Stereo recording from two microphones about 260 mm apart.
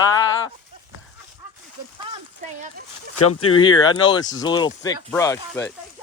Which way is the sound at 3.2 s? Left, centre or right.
Left.